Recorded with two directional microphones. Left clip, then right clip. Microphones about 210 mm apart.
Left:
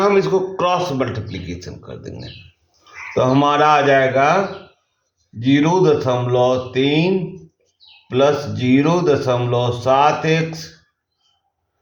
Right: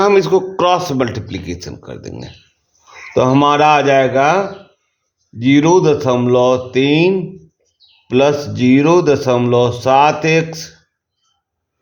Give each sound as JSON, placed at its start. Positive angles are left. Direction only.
{"t": 0.0, "sound": "speech", "side_deg": -55}
{"t": 5.4, "sound": "speech", "side_deg": -55}